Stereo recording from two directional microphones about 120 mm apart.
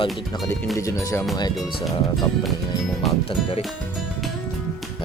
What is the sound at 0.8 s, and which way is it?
Speech, 25° left (ahead or behind).